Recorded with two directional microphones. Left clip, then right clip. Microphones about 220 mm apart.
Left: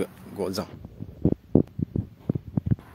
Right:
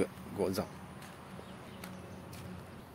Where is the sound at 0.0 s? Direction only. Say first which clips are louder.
Left 4 dB; 20° left (ahead or behind).